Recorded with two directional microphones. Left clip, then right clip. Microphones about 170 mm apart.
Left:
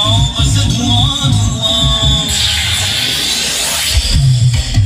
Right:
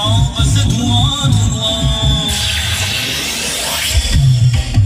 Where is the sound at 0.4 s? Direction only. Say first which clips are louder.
Left 2 dB; 20° right (ahead or behind).